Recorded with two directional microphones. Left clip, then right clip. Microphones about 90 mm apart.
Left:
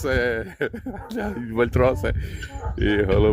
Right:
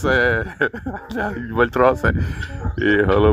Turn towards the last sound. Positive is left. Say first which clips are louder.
# right 5 dB
turn(degrees=35)  # may be behind; listen again after turning